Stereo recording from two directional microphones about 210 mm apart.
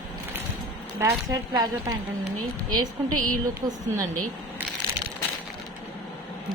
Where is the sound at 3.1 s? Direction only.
90° right.